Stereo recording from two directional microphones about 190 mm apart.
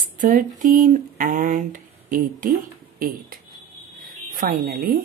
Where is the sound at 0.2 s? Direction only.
45° right (ahead or behind).